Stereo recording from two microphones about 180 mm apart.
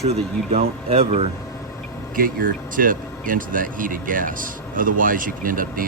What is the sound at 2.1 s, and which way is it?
Speech, 50° right (ahead or behind).